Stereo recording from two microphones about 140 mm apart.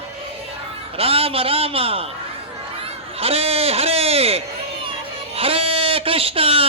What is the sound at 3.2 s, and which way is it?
A man's voice, 45° right (ahead or behind).